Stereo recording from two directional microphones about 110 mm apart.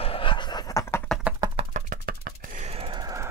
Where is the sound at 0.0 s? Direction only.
55° left (ahead or behind); by 0.8 s 35° left (ahead or behind).